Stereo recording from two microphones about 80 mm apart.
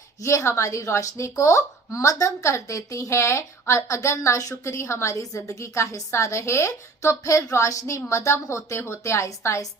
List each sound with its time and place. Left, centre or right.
0.2 s speech: left